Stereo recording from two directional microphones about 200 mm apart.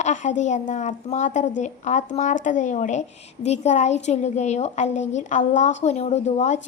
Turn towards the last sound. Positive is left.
turn(degrees=35)  # may be behind; listen again after turning